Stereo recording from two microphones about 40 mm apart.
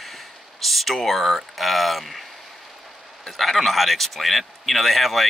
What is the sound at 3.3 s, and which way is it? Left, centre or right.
Speech, centre.